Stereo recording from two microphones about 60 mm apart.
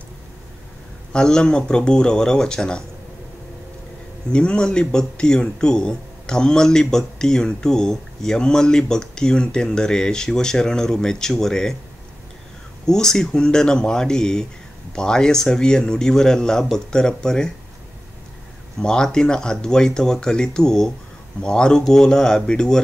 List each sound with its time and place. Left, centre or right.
1.1 s speech: centre
4.3 s speech: centre
12.8 s speech: centre
18.8 s speech: centre